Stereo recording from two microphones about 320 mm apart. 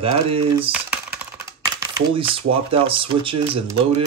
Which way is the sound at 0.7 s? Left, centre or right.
Centre.